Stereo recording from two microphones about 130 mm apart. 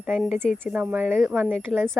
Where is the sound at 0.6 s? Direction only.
10° right (ahead or behind).